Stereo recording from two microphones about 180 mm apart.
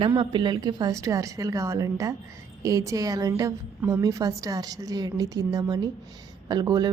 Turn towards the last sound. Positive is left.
turn(degrees=-20)  # may be behind; listen again after turning